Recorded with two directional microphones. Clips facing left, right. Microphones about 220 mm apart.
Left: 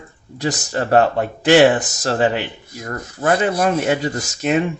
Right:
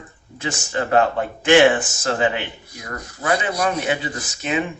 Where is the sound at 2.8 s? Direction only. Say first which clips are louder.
Left 4 dB; 50° left (ahead or behind).